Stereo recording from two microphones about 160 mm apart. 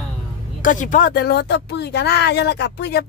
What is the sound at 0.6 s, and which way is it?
Speech, 55° left (ahead or behind).